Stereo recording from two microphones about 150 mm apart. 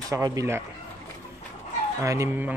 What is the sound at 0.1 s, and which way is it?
Speech, 20° right (ahead or behind).